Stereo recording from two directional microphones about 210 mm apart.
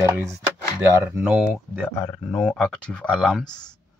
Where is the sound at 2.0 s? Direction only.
5° left (ahead or behind).